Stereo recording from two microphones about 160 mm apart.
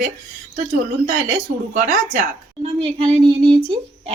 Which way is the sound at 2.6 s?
35° right (ahead or behind).